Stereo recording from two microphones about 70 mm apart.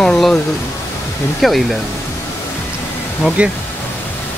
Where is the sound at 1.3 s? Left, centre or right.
Centre.